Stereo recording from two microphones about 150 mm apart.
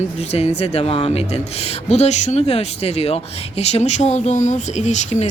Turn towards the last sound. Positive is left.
turn(degrees=50)  # may be behind; listen again after turning